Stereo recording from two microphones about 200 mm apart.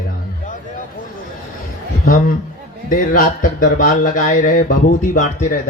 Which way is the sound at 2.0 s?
40° left (ahead or behind).